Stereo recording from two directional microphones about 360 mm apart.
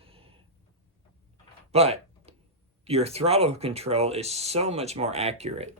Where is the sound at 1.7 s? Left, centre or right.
Centre.